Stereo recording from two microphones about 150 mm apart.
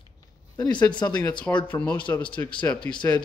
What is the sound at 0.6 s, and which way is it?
Speech, 30° left (ahead or behind).